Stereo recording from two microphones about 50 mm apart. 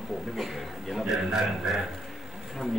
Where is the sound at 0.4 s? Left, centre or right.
Centre.